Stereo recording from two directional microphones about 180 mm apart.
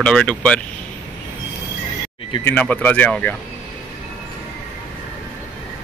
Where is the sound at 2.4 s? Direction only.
10° left (ahead or behind).